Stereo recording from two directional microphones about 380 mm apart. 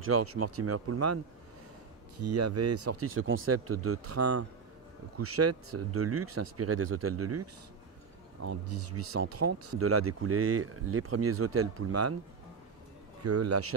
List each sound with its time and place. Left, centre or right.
0.0 s speech: right
2.3 s speech: right
9.1 s speech: right
13.2 s speech: right